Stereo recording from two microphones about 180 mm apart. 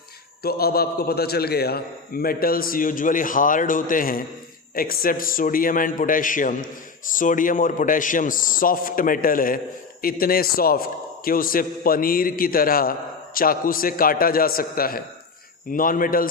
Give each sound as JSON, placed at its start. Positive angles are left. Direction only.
{"t": 0.4, "sound": "a man's voice", "side_deg": 60}